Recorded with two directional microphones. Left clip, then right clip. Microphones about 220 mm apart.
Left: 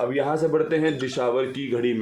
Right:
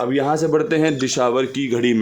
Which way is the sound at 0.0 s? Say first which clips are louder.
Right 4 dB; 50° right (ahead or behind).